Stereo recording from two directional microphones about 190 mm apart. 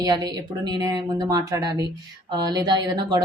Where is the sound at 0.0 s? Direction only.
20° right (ahead or behind).